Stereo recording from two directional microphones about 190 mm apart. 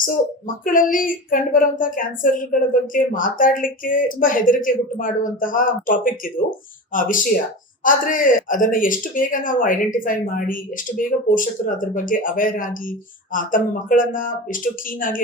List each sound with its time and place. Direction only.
0.0 s speech: 45° left (ahead or behind)